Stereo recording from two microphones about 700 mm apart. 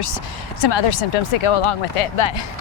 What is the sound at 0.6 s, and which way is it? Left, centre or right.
Speech, left.